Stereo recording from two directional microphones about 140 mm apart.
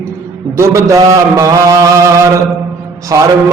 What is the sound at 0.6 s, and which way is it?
Mantra, 20° right (ahead or behind).